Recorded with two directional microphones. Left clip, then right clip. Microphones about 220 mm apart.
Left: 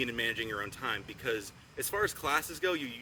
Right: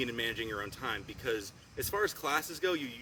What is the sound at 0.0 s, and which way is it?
Speech, 5° left (ahead or behind).